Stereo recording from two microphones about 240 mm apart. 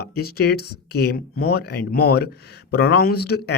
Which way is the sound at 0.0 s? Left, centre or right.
Left.